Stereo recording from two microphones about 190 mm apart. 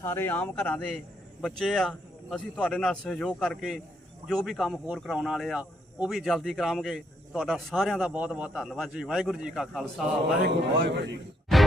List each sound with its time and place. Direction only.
0.0 s speech: 10° left (ahead or behind)
10.4 s speech: 60° right (ahead or behind)